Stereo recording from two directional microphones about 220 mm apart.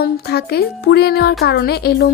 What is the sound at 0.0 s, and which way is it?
Speech, 45° left (ahead or behind).